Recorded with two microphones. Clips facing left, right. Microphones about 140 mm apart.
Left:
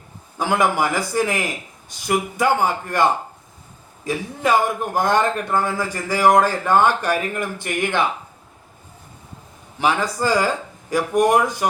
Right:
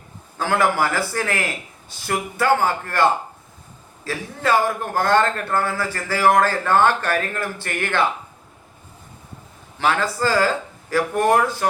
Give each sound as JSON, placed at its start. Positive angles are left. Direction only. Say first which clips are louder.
{"t": 0.3, "sound": "a man's voice", "louder": "even", "side_deg": 15}
{"t": 9.7, "sound": "a man's voice", "louder": "left 1 dB", "side_deg": 15}